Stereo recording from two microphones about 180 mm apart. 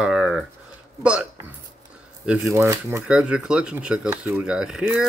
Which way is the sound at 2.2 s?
10° right (ahead or behind).